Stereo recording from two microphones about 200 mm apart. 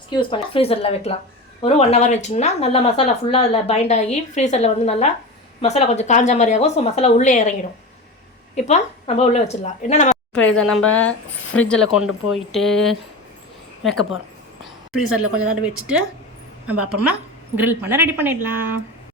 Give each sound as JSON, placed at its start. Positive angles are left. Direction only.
{"t": 0.1, "sound": "speech", "side_deg": 25}
{"t": 8.5, "sound": "speech", "side_deg": 35}
{"t": 10.4, "sound": "a woman's voice", "side_deg": 5}